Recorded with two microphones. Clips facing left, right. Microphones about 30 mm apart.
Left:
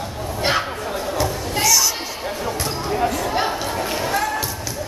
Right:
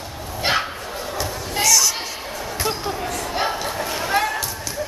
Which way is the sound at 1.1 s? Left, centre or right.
Centre.